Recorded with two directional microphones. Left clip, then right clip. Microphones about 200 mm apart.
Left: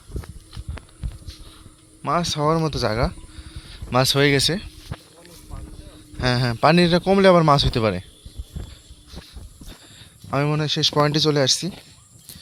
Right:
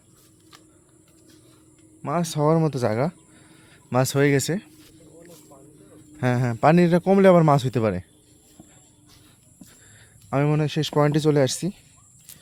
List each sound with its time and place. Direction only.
2.2 s a man's voice: 30° right (ahead or behind); by 4.7 s 15° right (ahead or behind)
6.1 s a man's voice: 15° right (ahead or behind)
10.0 s speech: 20° right (ahead or behind)